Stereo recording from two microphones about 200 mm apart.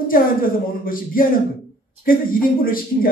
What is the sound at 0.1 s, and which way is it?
A man's voice, 45° left (ahead or behind).